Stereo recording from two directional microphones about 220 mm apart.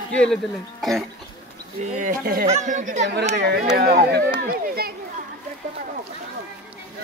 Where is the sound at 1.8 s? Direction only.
35° right (ahead or behind).